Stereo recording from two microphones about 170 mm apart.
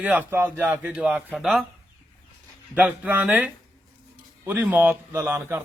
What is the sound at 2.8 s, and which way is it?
A man's voice, 10° right (ahead or behind).